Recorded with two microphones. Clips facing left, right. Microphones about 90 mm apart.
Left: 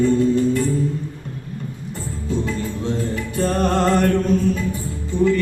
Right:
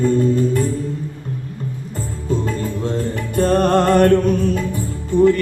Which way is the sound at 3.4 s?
50° right (ahead or behind).